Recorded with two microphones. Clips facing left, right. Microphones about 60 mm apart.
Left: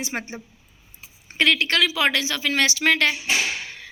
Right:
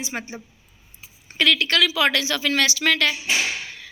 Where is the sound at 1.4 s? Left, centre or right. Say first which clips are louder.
Even; left.